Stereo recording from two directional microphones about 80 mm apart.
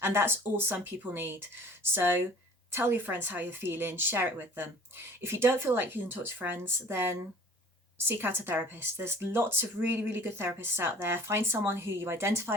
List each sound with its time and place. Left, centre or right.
0.0 s speech: right